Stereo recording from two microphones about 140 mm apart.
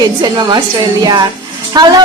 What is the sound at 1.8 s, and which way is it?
Speech, 30° right (ahead or behind).